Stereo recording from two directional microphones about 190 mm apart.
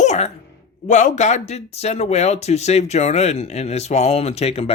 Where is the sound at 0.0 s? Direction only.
35° left (ahead or behind).